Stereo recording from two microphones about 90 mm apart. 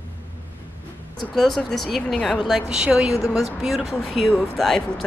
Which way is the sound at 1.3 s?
5° left (ahead or behind).